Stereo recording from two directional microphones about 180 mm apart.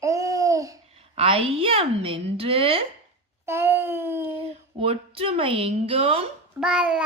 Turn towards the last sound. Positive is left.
turn(degrees=-5)  # may be behind; listen again after turning